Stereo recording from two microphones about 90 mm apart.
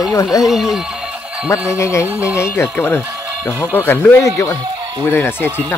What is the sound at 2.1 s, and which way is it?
Speech, 15° right (ahead or behind).